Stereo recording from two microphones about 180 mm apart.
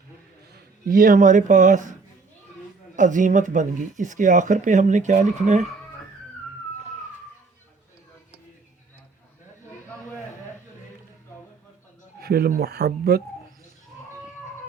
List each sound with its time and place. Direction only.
0.9 s speech: 50° right (ahead or behind)
12.2 s speech: 60° right (ahead or behind)